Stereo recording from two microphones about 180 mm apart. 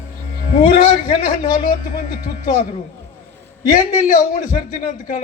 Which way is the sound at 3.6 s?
50° left (ahead or behind).